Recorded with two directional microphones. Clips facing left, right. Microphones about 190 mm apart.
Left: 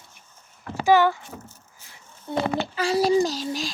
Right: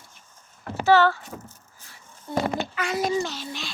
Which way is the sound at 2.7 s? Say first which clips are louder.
Left 8 dB; 30° left (ahead or behind).